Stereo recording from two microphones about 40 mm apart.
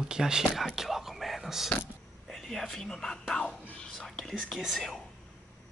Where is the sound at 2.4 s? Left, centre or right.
Centre.